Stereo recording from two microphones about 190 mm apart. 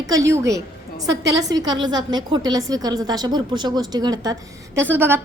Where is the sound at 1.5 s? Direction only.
20° right (ahead or behind).